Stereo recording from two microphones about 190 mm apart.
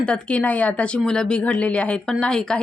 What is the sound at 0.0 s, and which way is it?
Speech, 5° left (ahead or behind).